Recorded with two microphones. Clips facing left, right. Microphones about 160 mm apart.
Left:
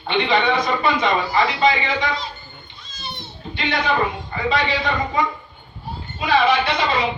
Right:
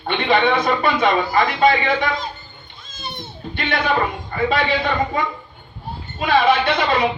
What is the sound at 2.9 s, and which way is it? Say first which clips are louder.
Children playing: right 2 dB; 50° right (ahead or behind).